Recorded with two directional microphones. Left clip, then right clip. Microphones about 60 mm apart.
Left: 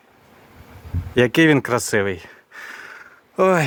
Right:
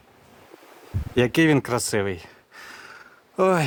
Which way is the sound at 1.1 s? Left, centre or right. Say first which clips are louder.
Left 4 dB; left.